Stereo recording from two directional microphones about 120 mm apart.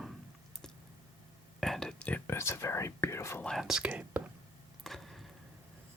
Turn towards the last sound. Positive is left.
turn(degrees=0)  # may be behind; listen again after turning